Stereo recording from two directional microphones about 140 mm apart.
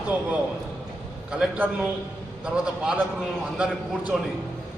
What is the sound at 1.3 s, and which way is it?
A man's voice, 5° right (ahead or behind).